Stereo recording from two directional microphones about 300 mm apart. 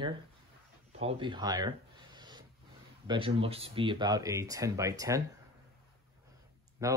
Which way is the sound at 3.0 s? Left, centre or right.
Centre.